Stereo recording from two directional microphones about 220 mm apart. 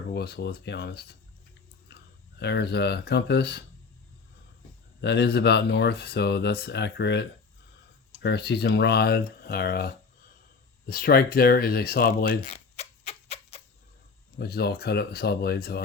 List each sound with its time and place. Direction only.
0.1 s speech: 50° left (ahead or behind)
2.4 s speech: 50° left (ahead or behind)
4.9 s speech: 50° left (ahead or behind)
12.5 s a sound: 30° left (ahead or behind)
14.3 s speech: 45° left (ahead or behind)